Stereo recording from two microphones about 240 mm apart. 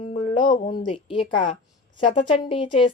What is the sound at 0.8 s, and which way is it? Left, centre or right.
A woman's voice, left.